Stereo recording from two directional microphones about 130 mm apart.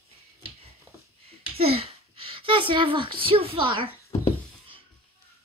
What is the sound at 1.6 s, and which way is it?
A woman's voice, 50° right (ahead or behind).